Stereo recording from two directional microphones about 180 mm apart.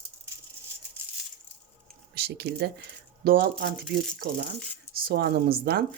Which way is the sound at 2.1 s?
60° right (ahead or behind).